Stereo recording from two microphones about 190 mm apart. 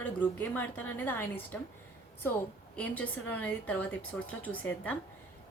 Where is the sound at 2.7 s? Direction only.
10° left (ahead or behind).